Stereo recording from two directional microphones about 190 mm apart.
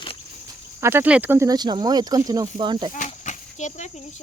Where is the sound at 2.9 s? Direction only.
40° left (ahead or behind).